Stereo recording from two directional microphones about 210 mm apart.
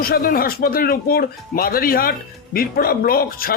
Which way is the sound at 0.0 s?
45° left (ahead or behind).